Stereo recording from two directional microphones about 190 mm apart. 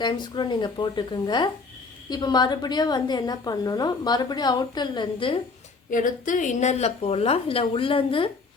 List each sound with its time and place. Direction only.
0.0 s a woman's voice: 25° left (ahead or behind)
5.9 s a woman's voice: 45° left (ahead or behind); by 8.3 s 30° left (ahead or behind)